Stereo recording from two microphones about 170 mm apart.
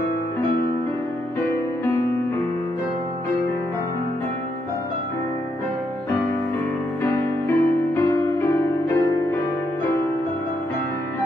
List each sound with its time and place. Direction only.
7.0 s music: 15° left (ahead or behind)